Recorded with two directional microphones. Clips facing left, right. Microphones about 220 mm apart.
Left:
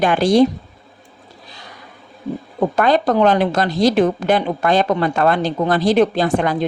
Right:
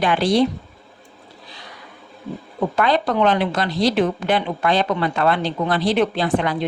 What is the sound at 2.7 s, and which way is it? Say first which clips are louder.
A woman's voice: left 4 dB; 45° left (ahead or behind).